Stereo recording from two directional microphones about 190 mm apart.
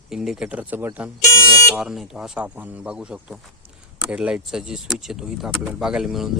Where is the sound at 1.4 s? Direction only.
15° left (ahead or behind).